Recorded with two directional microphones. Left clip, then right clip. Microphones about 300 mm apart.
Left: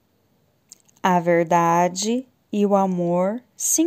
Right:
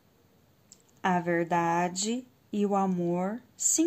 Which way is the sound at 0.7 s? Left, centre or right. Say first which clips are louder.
Left 9 dB; left.